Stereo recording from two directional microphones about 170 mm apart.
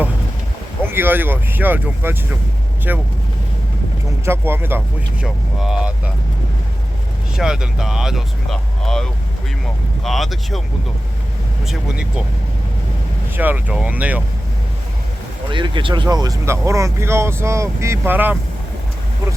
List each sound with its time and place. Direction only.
0.9 s speech: 10° right (ahead or behind)
4.3 s speech: 15° right (ahead or behind)
7.3 s speech: 5° right (ahead or behind)
11.6 s speech: 5° right (ahead or behind)
13.3 s speech: 10° right (ahead or behind)
15.4 s speech: 30° right (ahead or behind); by 18.3 s 10° right (ahead or behind)